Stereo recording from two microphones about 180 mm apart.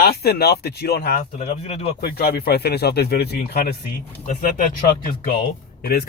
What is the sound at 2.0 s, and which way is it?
Speech, 60° left (ahead or behind).